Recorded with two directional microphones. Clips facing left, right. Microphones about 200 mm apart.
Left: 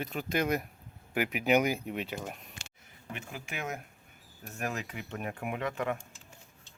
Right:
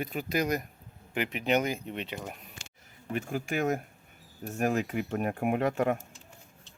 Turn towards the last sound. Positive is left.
turn(degrees=-45)  # may be behind; listen again after turning